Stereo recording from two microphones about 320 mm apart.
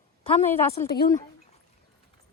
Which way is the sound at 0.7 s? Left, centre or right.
Left.